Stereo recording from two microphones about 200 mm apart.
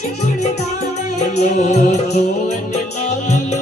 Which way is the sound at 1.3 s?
35° left (ahead or behind).